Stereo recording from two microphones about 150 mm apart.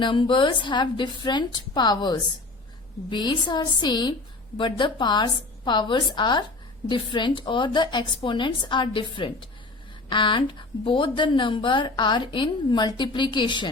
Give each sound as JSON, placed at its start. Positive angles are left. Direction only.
{"t": 0.0, "sound": "a woman's voice", "side_deg": 35}